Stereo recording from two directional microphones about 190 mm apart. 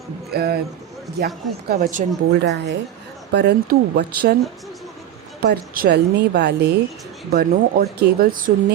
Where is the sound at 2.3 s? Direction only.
65° right (ahead or behind).